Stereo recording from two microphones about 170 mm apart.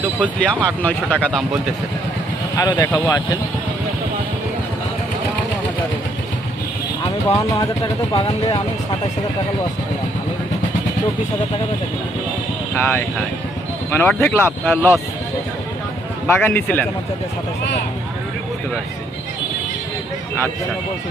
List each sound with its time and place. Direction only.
0.3 s speech: 5° left (ahead or behind)
2.6 s speech: 20° left (ahead or behind)
7.3 s speech: 20° left (ahead or behind)
12.7 s speech: 10° left (ahead or behind)
16.2 s speech: 10° left (ahead or behind)